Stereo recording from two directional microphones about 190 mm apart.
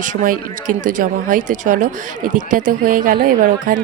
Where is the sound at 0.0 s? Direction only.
45° right (ahead or behind).